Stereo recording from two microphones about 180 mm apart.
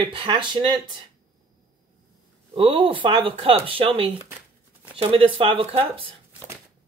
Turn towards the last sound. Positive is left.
turn(degrees=-30)  # may be behind; listen again after turning